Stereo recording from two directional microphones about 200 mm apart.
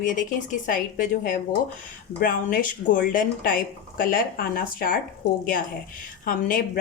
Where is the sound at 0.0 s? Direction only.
40° left (ahead or behind).